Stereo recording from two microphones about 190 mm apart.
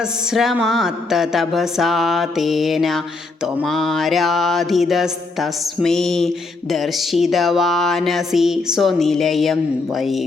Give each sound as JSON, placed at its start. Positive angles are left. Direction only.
{"t": 0.0, "sound": "mantra", "side_deg": 0}